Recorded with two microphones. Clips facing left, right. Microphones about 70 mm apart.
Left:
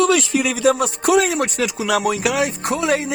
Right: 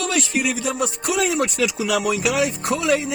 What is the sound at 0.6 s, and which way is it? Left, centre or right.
Music, left.